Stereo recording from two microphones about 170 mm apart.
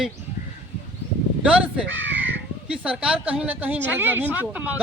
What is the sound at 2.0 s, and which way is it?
Crow, 90° right.